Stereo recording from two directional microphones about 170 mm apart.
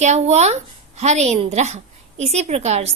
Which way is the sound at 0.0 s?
40° right (ahead or behind).